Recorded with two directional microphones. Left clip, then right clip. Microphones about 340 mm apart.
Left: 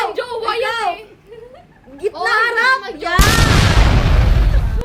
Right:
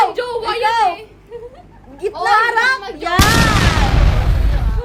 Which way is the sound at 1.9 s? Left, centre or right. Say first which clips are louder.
Right 2 dB; centre.